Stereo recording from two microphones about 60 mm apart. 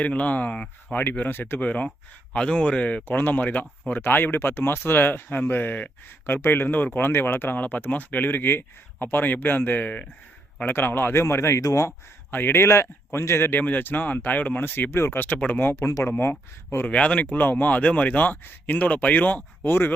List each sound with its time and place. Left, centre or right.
0.0 s speech: left
1.2 s speech: left
1.6 s speech: left
10.8 s speech: left
11.6 s speech: left
12.3 s speech: left
12.5 s speech: left
13.6 s speech: left
15.8 s speech: left
16.1 s speech: left
16.8 s speech: left
19.6 s speech: left